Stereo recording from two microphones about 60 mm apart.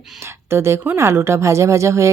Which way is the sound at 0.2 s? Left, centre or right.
Right.